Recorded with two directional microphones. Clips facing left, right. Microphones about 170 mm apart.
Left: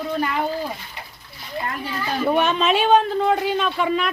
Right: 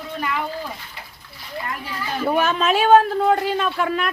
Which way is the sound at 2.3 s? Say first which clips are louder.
Even; centre (ahead or behind).